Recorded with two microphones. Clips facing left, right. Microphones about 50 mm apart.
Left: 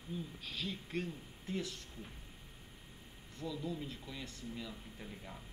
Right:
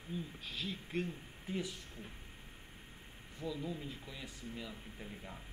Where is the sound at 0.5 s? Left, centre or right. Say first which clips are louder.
Left 1 dB; centre.